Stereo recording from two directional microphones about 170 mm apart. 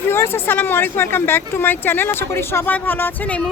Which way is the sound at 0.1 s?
15° left (ahead or behind).